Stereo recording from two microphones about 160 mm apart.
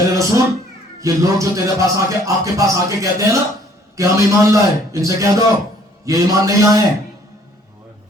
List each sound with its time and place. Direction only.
0.1 s cat: 20° right (ahead or behind)
1.0 s music: 20° right (ahead or behind)